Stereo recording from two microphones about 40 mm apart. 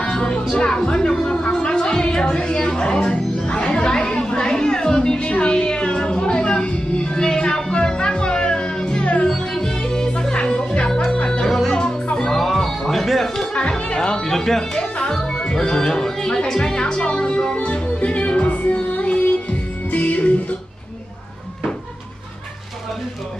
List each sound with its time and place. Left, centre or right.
0.0 s music: left
12.3 s music: centre
13.6 s music: left